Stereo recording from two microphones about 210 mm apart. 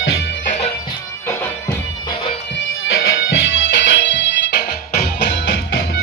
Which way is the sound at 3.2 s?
65° left (ahead or behind).